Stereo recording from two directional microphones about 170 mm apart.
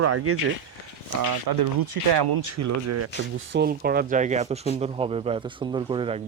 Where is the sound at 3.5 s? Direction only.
80° right.